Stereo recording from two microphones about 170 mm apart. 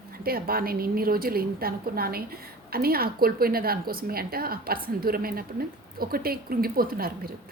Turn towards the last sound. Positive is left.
turn(degrees=-60)  # may be behind; listen again after turning